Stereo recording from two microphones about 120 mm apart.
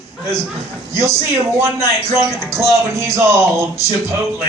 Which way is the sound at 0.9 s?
25° right (ahead or behind).